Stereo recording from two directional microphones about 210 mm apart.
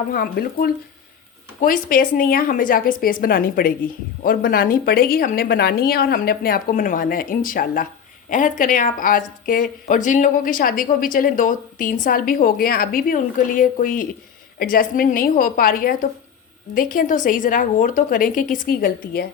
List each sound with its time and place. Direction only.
0.1 s a woman's voice: 45° left (ahead or behind)